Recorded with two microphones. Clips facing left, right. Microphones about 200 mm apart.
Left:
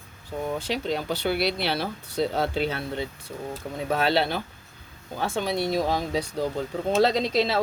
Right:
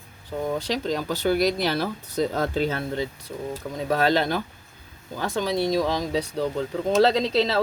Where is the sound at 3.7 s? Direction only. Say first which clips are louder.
Right 2 dB; 40° right (ahead or behind).